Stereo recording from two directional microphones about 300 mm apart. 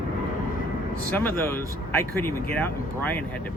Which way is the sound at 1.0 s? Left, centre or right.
Centre.